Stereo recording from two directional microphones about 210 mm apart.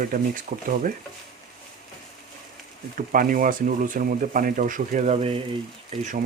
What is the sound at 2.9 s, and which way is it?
Speech, 40° right (ahead or behind).